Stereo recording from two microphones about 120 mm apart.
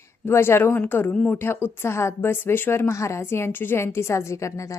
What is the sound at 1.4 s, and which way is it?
A woman's voice, 20° left (ahead or behind).